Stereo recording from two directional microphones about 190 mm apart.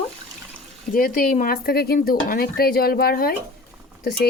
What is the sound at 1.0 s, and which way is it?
Speech, 50° left (ahead or behind).